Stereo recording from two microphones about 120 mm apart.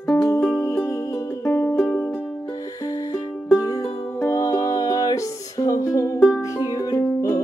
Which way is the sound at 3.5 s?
30° left (ahead or behind).